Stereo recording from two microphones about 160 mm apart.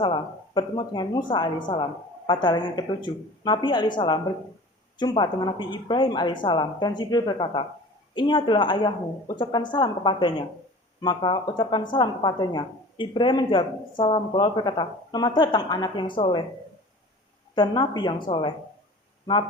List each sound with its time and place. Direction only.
0.0 s a woman's voice: 30° left (ahead or behind)
17.5 s a woman's voice: 30° left (ahead or behind)